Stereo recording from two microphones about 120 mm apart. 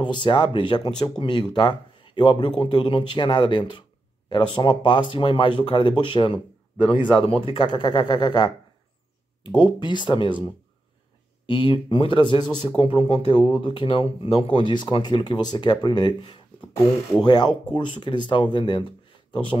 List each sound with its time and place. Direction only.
0.0 s speech: 40° left (ahead or behind)
9.6 s speech: 40° left (ahead or behind)